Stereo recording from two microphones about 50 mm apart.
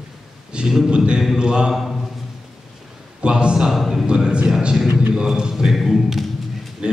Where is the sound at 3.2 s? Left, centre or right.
Centre.